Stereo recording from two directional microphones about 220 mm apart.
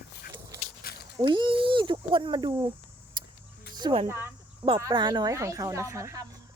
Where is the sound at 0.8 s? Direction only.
45° left (ahead or behind).